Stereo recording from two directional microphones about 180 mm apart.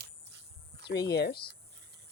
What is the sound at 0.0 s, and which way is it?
Cricket, 70° right (ahead or behind).